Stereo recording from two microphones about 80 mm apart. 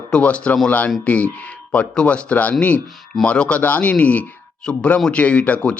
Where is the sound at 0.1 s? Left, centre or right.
Centre.